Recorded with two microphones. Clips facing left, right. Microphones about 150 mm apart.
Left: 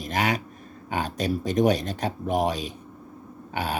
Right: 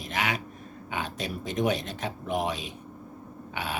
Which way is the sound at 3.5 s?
40° left (ahead or behind).